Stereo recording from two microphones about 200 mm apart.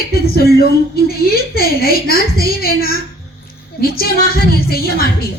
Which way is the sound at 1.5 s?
50° left (ahead or behind).